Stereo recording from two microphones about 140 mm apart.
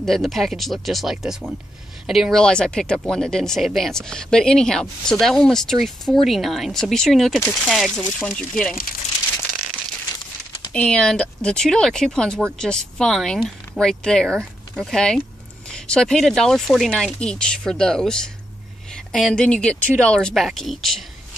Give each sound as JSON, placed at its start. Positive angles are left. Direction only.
{"t": 0.0, "sound": "speech", "side_deg": 0}
{"t": 10.7, "sound": "speech", "side_deg": 5}